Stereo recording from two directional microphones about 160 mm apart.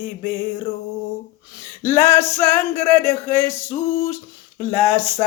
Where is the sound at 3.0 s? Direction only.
15° left (ahead or behind).